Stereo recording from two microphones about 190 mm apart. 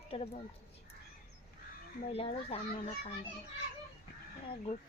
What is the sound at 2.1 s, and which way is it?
Speech, 30° left (ahead or behind).